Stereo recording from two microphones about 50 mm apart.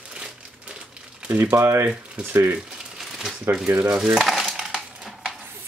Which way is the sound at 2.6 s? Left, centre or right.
Centre.